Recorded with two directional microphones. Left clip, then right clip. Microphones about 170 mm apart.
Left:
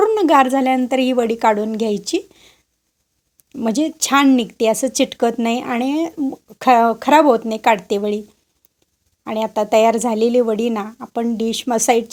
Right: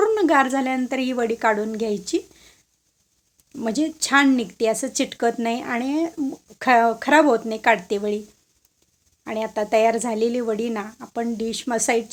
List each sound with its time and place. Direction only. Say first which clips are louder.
0.0 s a woman's voice: left 5 dB; 30° left (ahead or behind)
9.2 s speech: left 5 dB; 35° left (ahead or behind)